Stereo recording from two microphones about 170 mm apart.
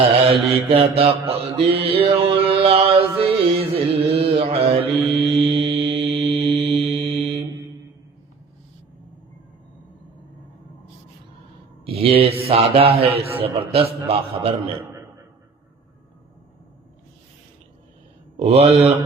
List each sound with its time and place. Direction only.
0.3 s a man's voice: 35° right (ahead or behind)
1.5 s a sound: 35° right (ahead or behind)
5.0 s mantra: 35° right (ahead or behind)
11.9 s a man's voice: 35° right (ahead or behind)
18.3 s a man's voice: 35° right (ahead or behind)